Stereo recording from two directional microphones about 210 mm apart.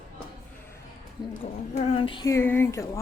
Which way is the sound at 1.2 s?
20° left (ahead or behind).